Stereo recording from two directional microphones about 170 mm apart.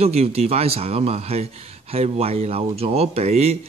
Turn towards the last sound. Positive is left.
turn(degrees=-40)  # may be behind; listen again after turning